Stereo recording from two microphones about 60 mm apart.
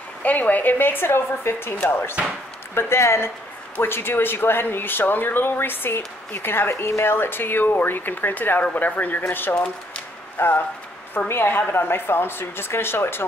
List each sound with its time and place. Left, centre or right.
0.2 s speech: left
2.7 s speech: left